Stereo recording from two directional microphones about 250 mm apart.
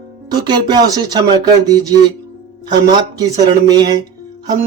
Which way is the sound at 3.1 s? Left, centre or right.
Centre.